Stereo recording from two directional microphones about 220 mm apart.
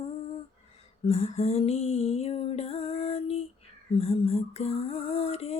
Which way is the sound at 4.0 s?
25° left (ahead or behind).